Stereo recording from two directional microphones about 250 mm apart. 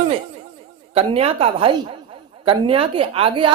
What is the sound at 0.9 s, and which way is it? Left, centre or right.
A woman's voice, right.